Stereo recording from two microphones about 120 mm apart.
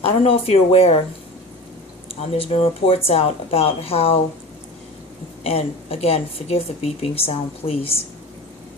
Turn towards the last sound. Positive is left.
turn(degrees=55)  # may be behind; listen again after turning